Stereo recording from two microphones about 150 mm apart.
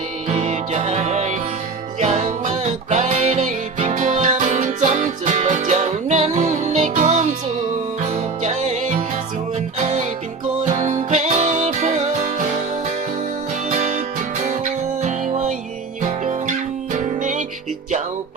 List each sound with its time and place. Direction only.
0.3 s music: 50° right (ahead or behind)
13.7 s music: 55° right (ahead or behind)